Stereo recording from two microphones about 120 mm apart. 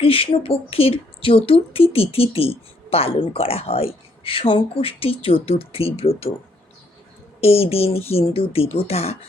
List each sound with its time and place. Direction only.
0.0 s speech: 50° left (ahead or behind)
7.4 s speech: 55° left (ahead or behind)